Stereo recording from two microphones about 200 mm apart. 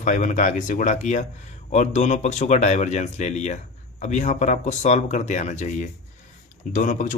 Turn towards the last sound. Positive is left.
turn(degrees=40)  # may be behind; listen again after turning